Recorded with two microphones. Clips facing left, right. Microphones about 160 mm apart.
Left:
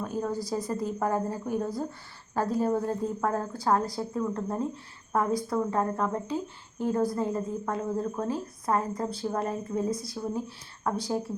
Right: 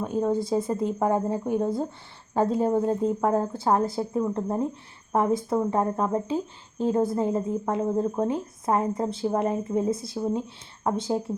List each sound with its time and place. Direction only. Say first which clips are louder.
0.0 s speech: right 6 dB; 25° right (ahead or behind)